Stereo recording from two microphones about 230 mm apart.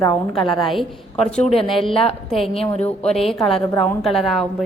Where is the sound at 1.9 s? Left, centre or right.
Left.